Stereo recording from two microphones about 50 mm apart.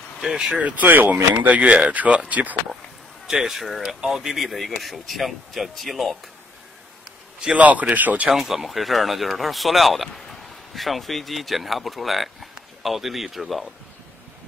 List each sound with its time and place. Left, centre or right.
0.2 s speech: centre
0.6 s speech: right
3.3 s speech: centre
7.5 s speech: right
8.4 s speech: centre